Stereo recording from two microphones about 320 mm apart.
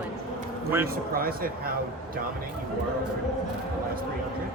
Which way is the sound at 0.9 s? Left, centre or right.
Right.